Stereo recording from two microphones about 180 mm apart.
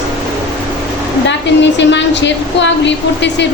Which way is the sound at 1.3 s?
80° left.